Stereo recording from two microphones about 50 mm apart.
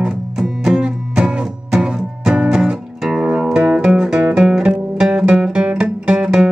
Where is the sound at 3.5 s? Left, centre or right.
Right.